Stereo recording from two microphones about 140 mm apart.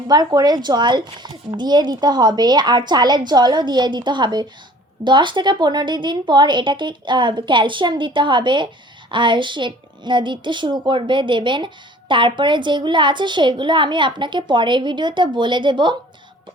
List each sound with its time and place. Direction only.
0.1 s a woman's voice: 30° right (ahead or behind)